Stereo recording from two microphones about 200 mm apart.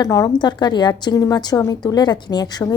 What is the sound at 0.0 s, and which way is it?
A woman's voice, 15° left (ahead or behind).